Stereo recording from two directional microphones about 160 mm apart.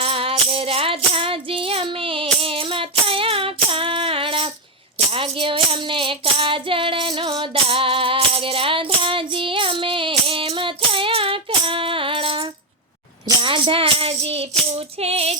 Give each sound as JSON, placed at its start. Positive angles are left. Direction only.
{"t": 0.0, "sound": "music", "side_deg": -35}